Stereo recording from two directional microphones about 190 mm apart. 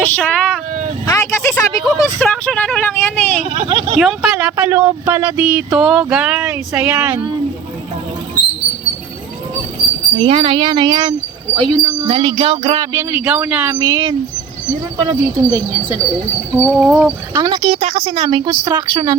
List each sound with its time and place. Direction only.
0.0 s speech: 5° left (ahead or behind)
1.0 s a sound: 15° left (ahead or behind)
1.8 s speech: 5° left (ahead or behind)
3.7 s speech: 30° right (ahead or behind)
3.9 s speech: 5° right (ahead or behind)
4.5 s a sound: 10° right (ahead or behind)
10.2 s speech: 30° right (ahead or behind)
12.9 s a sound: 10° right (ahead or behind)
15.4 s speech: 20° right (ahead or behind)
16.7 s speech: 5° right (ahead or behind)
17.3 s speech: 25° right (ahead or behind)